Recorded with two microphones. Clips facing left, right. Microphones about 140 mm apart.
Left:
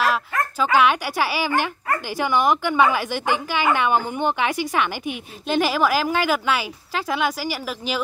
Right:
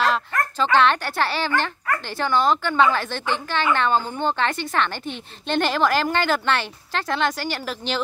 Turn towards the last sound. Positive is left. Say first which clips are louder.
# even
turn(degrees=5)  # may be behind; listen again after turning